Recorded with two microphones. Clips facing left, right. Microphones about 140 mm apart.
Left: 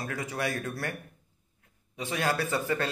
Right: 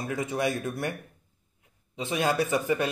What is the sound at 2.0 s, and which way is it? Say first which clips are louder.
Speech: right 3 dB; 20° right (ahead or behind).